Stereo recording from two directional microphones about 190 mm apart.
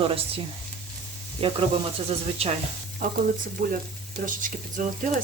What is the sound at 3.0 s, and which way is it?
Speech, 45° right (ahead or behind).